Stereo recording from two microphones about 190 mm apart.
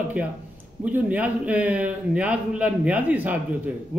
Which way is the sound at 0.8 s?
10° right (ahead or behind).